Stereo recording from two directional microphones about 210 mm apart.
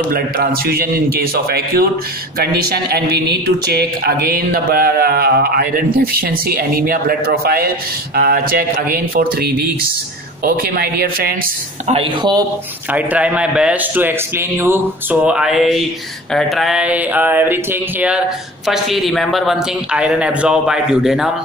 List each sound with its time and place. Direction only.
0.1 s speech: 45° right (ahead or behind)
11.9 s speech: 25° right (ahead or behind)
12.9 s a man's voice: 5° right (ahead or behind)
16.3 s a sound: centre (ahead or behind)
18.7 s a man's voice: centre (ahead or behind)